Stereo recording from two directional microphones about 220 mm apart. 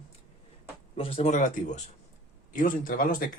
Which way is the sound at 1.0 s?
25° left (ahead or behind).